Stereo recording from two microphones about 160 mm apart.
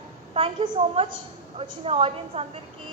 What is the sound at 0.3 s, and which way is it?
A woman's voice, 35° right (ahead or behind).